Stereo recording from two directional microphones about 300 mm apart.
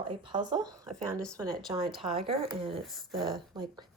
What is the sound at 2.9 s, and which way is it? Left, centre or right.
Speech, centre.